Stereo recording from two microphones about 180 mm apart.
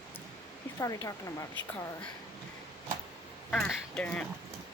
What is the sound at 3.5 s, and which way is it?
Speech, 5° left (ahead or behind).